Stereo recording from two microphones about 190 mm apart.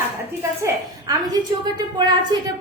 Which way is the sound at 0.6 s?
20° right (ahead or behind).